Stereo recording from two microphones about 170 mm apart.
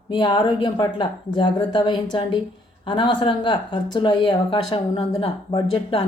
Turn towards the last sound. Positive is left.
turn(degrees=30)  # may be behind; listen again after turning